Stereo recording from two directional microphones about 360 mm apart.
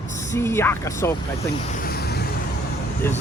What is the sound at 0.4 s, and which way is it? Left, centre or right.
Speech, centre.